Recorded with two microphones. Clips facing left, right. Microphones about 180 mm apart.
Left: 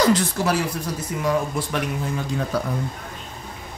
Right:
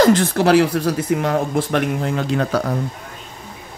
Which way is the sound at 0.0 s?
55° right (ahead or behind).